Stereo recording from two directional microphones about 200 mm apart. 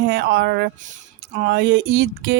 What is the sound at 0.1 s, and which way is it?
Speech, 55° right (ahead or behind).